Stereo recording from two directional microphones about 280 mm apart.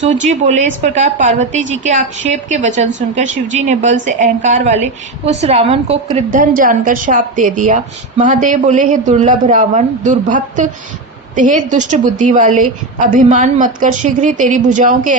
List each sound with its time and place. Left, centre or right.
0.1 s a woman's voice: right